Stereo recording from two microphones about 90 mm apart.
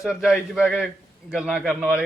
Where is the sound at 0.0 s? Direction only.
5° right (ahead or behind).